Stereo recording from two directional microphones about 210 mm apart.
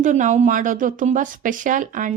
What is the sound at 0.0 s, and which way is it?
Speech, 35° right (ahead or behind).